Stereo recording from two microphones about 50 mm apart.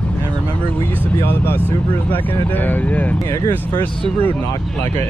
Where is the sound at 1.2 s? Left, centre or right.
Left.